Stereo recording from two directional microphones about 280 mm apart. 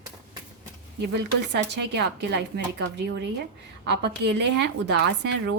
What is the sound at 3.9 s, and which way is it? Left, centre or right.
A woman's voice, right.